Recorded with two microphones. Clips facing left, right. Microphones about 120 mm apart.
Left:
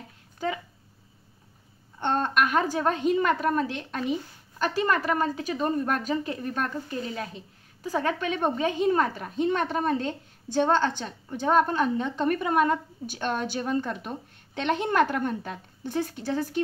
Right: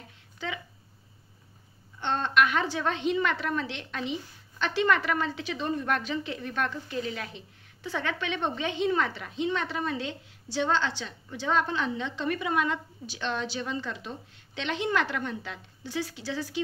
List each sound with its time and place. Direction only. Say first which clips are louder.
2.0 s a woman's voice: left 1 dB; 50° left (ahead or behind)